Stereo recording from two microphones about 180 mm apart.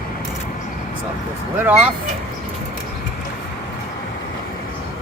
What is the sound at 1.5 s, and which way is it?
Speech, 10° right (ahead or behind).